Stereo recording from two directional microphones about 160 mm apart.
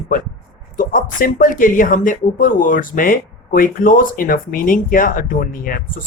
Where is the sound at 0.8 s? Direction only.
60° left (ahead or behind).